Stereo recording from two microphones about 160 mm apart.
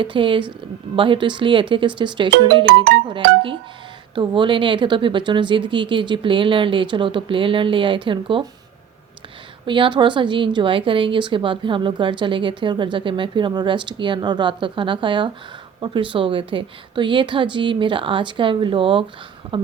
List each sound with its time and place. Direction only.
0.0 s speech: 30° right (ahead or behind)
9.6 s speech: 30° right (ahead or behind)